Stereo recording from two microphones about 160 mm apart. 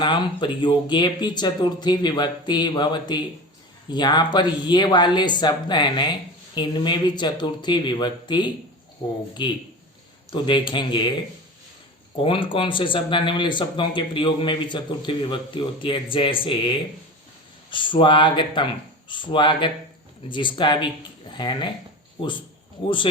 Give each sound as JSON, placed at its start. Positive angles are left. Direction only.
{"t": 0.0, "sound": "speech", "side_deg": 30}
{"t": 12.1, "sound": "speech", "side_deg": 35}